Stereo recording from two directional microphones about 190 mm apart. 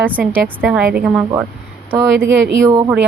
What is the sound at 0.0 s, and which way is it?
Speech, 10° right (ahead or behind).